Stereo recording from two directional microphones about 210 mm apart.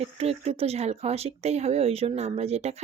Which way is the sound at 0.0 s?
30° right (ahead or behind).